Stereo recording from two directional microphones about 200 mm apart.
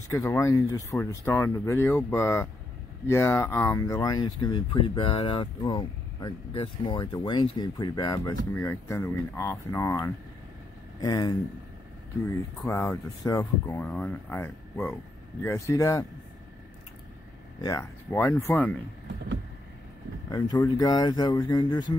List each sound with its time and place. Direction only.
0.1 s speech: 15° left (ahead or behind)
12.6 s speech: 10° left (ahead or behind)
17.6 s speech: 15° left (ahead or behind)
20.2 s speech: 20° left (ahead or behind)